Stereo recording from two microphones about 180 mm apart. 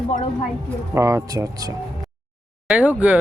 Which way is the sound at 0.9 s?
15° right (ahead or behind).